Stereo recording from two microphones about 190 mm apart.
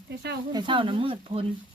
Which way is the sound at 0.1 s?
60° right (ahead or behind).